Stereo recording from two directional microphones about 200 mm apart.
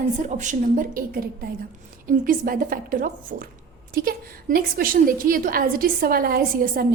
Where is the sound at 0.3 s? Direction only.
40° right (ahead or behind).